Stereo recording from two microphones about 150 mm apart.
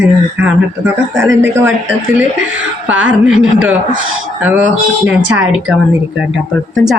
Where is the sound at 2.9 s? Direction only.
10° right (ahead or behind).